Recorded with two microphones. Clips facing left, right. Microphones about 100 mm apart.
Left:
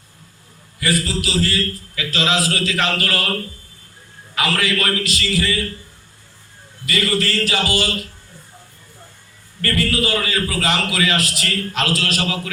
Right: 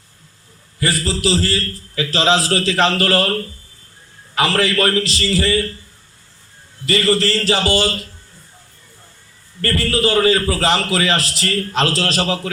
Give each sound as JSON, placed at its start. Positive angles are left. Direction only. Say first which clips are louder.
{"t": 0.8, "sound": "a man's voice", "louder": "right 1 dB", "side_deg": -30}
{"t": 4.4, "sound": "a man's voice", "louder": "right 4 dB", "side_deg": -30}
{"t": 6.8, "sound": "a man's voice", "louder": "right 4 dB", "side_deg": -30}
{"t": 9.6, "sound": "a man's voice", "louder": "right 2 dB", "side_deg": -30}